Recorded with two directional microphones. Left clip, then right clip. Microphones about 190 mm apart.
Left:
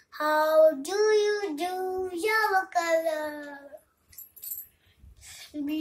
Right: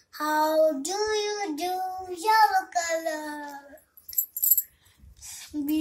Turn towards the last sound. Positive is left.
turn(degrees=20)  # may be behind; listen again after turning